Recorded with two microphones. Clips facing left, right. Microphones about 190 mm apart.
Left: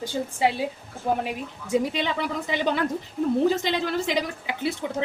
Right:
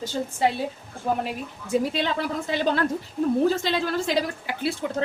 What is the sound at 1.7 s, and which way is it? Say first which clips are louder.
A woman's voice: even; 15° left (ahead or behind).